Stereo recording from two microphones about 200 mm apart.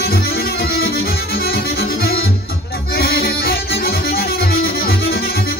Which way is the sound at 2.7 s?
50° left (ahead or behind).